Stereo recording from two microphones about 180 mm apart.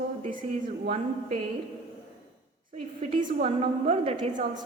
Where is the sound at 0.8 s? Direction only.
40° right (ahead or behind).